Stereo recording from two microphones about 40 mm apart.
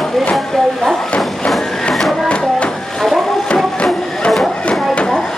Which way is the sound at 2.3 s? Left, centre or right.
Left.